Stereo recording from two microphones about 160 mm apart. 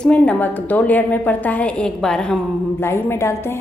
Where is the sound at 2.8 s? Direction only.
15° left (ahead or behind).